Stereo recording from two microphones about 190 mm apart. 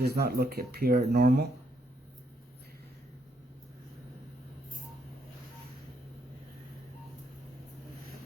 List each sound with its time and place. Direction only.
0.0 s speech: 55° right (ahead or behind)